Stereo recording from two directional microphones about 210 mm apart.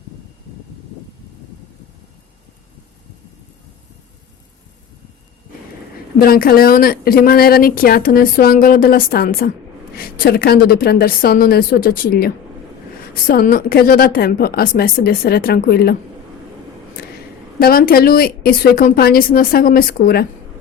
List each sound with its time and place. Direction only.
6.1 s speech: 45° left (ahead or behind)
17.6 s speech: 45° left (ahead or behind)